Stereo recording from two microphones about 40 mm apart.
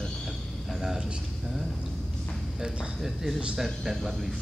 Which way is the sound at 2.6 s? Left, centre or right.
Centre.